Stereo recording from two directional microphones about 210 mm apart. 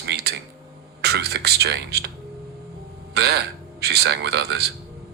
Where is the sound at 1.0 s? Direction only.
50° right (ahead or behind).